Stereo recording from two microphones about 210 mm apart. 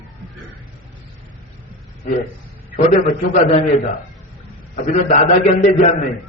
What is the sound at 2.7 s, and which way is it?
A man's voice, 30° left (ahead or behind).